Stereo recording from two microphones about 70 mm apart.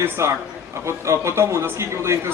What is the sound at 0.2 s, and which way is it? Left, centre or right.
A man's voice, right.